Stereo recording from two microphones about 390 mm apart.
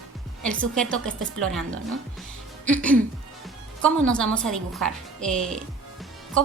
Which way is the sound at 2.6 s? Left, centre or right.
Centre.